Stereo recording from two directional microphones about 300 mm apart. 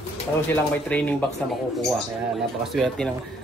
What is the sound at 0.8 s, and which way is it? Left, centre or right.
Speech, centre.